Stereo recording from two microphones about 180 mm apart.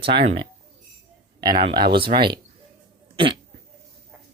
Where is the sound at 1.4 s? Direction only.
25° right (ahead or behind).